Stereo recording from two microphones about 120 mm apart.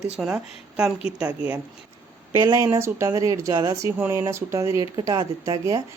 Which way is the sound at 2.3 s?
25° right (ahead or behind).